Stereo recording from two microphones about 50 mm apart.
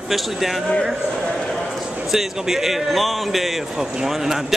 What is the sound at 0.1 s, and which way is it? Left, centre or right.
Speech, centre.